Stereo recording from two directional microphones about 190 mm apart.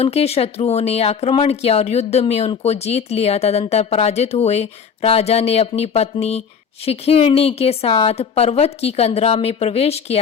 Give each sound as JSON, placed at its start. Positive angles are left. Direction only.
{"t": 0.0, "sound": "speech", "side_deg": 35}